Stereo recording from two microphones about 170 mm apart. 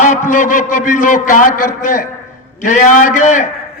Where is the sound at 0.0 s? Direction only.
50° left (ahead or behind).